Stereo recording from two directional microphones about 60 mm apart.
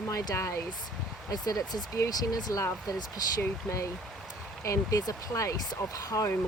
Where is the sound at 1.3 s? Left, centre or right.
Left.